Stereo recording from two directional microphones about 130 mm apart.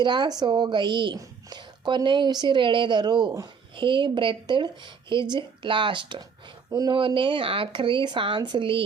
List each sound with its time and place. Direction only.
0.0 s speech: 35° right (ahead or behind)
6.7 s speech: 25° right (ahead or behind)
6.9 s speech: 40° right (ahead or behind)